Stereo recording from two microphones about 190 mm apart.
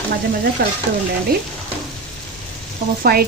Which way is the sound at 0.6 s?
55° right (ahead or behind).